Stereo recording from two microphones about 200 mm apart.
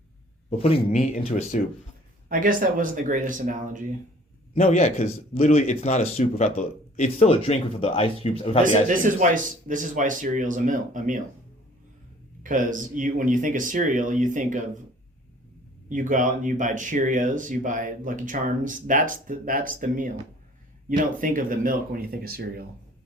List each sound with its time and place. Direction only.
0.6 s speech: 35° left (ahead or behind)
2.3 s speech: 45° right (ahead or behind)
4.5 s speech: 35° left (ahead or behind)
8.9 s speech: 40° right (ahead or behind)
12.4 s speech: 40° right (ahead or behind)
15.9 s speech: 40° right (ahead or behind)
21.2 s speech: 45° right (ahead or behind)